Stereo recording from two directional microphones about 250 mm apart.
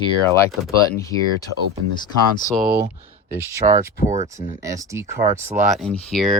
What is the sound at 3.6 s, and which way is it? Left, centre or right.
Speech, right.